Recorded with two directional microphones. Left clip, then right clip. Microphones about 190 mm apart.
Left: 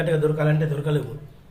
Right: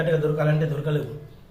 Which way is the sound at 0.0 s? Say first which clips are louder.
Left 1 dB; 25° left (ahead or behind).